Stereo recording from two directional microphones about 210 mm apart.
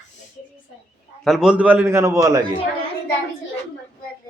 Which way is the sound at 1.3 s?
5° right (ahead or behind).